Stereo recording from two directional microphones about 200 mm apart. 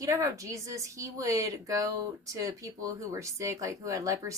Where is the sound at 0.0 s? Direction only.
15° right (ahead or behind).